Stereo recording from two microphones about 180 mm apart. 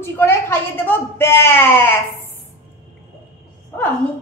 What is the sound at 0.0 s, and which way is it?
Speech, 15° left (ahead or behind).